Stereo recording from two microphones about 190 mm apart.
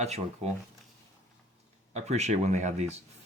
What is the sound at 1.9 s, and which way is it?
Speech, 35° right (ahead or behind).